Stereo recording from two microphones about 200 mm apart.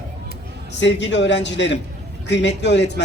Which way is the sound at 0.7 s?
65° left (ahead or behind).